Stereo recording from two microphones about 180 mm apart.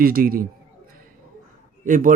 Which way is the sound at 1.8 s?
45° right (ahead or behind).